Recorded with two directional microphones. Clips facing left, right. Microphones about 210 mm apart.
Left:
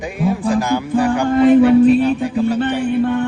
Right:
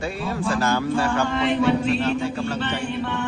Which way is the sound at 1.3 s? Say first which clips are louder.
Left 14 dB; 50° left (ahead or behind).